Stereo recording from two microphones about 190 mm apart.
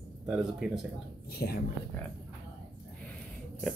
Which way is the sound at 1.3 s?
55° left (ahead or behind).